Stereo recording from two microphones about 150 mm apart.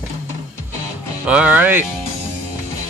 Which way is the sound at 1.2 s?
10° right (ahead or behind).